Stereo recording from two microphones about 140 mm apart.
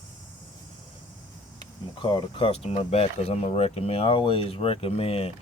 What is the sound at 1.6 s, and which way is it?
Speech, 35° left (ahead or behind).